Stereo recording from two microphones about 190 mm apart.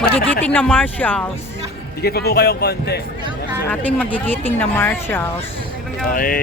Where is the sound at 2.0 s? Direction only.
55° left (ahead or behind).